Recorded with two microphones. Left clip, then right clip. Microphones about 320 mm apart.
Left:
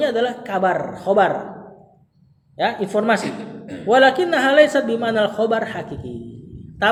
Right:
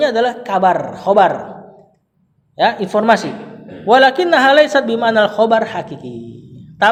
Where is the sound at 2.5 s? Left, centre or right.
Right.